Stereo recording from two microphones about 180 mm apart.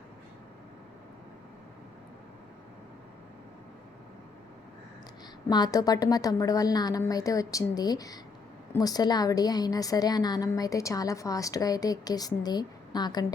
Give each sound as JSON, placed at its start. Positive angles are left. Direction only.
{"t": 5.5, "sound": "a woman's voice", "side_deg": 20}